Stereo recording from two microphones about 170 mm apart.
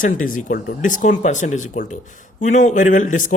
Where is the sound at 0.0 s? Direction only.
50° left (ahead or behind).